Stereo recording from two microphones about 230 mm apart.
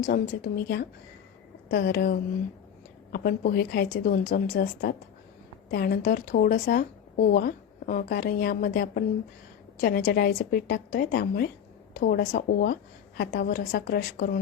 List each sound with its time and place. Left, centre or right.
0.0 s speech: left